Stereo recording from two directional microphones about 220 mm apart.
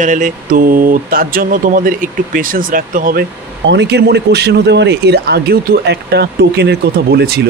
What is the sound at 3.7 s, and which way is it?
A man's voice, 50° right (ahead or behind).